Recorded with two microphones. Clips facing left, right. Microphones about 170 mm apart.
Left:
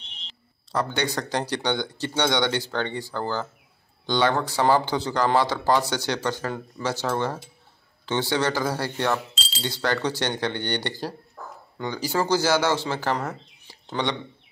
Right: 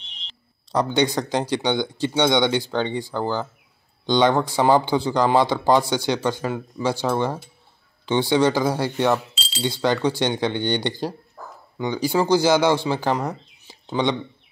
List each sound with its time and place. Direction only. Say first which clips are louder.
0.7 s speech: right 6 dB; 20° right (ahead or behind)